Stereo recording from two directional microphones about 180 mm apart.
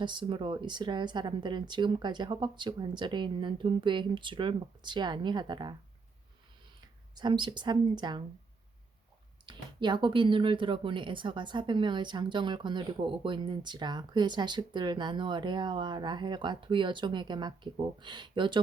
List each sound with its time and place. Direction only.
0.0 s speech: 25° right (ahead or behind)
7.2 s speech: 25° right (ahead or behind)
9.5 s speech: 25° right (ahead or behind)